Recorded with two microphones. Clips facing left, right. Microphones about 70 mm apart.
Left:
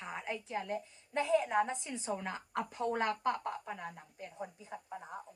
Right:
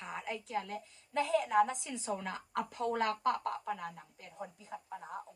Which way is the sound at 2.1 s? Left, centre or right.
Centre.